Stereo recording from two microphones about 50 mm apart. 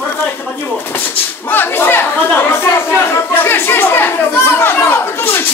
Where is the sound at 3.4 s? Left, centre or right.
Left.